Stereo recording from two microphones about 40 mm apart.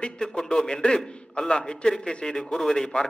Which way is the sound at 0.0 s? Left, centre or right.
Left.